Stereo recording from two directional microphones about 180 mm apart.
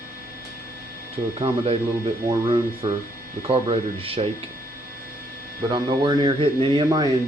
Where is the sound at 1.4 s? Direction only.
30° right (ahead or behind).